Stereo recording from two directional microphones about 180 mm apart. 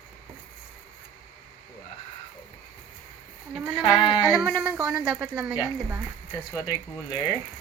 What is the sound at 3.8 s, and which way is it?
Sheep, 20° left (ahead or behind).